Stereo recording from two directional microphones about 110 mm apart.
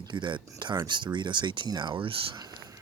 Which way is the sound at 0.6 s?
40° right (ahead or behind).